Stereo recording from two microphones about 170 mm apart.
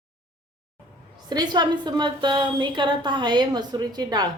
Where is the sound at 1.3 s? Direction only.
25° right (ahead or behind).